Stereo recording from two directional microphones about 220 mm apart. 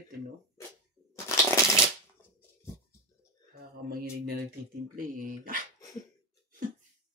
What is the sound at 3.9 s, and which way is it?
Mantra, 45° right (ahead or behind).